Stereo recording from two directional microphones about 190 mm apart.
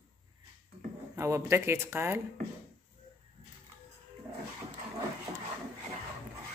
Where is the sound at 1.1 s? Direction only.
15° right (ahead or behind).